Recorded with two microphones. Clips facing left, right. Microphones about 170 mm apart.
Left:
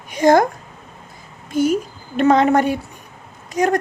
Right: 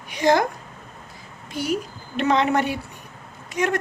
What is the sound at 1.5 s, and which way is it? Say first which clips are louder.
A woman's voice: left 8 dB; 45° left (ahead or behind).